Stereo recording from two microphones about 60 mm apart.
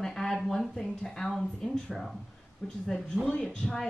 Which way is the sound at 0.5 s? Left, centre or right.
Centre.